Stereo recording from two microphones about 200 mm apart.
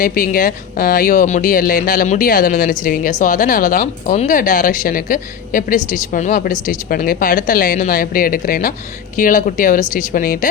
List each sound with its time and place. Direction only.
0.0 s speech: 45° left (ahead or behind)